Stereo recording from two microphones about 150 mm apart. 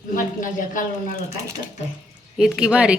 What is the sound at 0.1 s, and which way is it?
Speech, 65° left (ahead or behind).